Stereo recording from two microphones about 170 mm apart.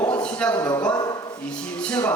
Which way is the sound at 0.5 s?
15° left (ahead or behind).